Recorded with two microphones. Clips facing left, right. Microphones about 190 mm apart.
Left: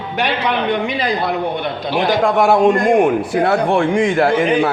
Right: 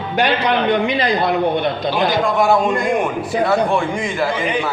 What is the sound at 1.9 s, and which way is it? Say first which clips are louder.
A man's voice: left 4 dB; 75° left (ahead or behind).